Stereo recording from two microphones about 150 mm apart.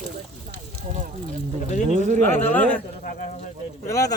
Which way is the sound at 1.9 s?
55° right (ahead or behind).